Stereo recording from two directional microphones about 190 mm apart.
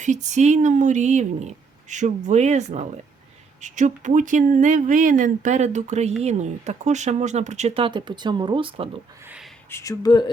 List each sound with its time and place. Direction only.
0.0 s speech: 40° right (ahead or behind)
9.6 s speech: 15° left (ahead or behind)